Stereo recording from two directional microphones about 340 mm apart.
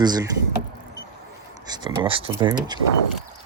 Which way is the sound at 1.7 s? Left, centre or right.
Centre.